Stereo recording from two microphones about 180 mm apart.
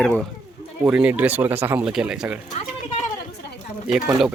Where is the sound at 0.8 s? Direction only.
5° right (ahead or behind).